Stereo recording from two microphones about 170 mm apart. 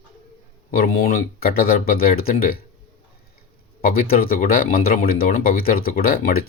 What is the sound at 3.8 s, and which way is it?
Speech, 60° left (ahead or behind).